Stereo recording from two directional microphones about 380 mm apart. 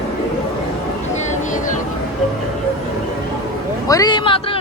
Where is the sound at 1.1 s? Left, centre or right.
Centre.